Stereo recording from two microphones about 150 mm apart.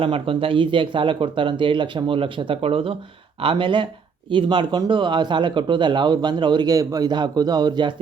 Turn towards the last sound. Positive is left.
turn(degrees=-30)  # may be behind; listen again after turning